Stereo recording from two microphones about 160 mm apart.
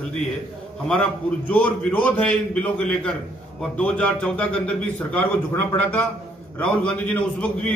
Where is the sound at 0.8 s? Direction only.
5° left (ahead or behind).